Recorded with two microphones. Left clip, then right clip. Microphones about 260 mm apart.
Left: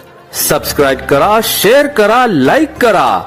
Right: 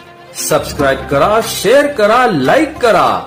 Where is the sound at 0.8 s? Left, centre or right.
Left.